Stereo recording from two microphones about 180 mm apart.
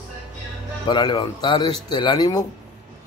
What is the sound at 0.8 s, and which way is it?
Speech, 25° left (ahead or behind).